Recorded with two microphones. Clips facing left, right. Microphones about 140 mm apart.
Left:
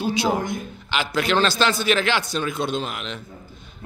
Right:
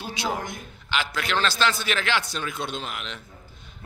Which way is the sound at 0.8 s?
20° left (ahead or behind).